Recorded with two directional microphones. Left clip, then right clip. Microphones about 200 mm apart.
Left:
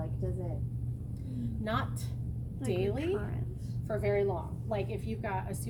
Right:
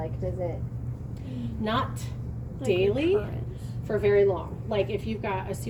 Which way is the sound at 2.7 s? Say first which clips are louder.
Right 9 dB; 30° left (ahead or behind).